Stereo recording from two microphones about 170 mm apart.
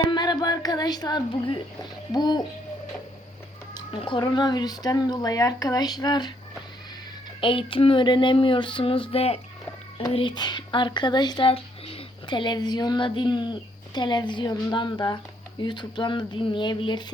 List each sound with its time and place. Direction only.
0.1 s music: 25° left (ahead or behind)
2.1 s speech: 25° left (ahead or behind)
3.8 s speech: 30° left (ahead or behind)
7.4 s female singing: 30° left (ahead or behind)
10.1 s speech: 30° left (ahead or behind)